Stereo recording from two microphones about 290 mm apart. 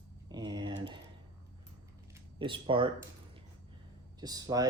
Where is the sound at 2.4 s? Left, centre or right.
Centre.